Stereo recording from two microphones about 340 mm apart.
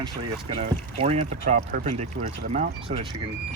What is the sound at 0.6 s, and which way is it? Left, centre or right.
Speech, centre.